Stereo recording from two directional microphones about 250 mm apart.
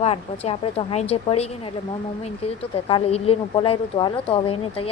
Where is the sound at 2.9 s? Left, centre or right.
Left.